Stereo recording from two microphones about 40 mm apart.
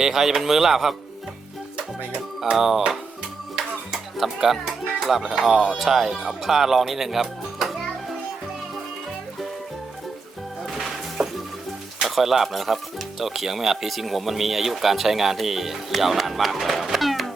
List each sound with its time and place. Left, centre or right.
0.0 s speech: centre
2.5 s speech: centre
10.7 s music: centre
12.0 s speech: centre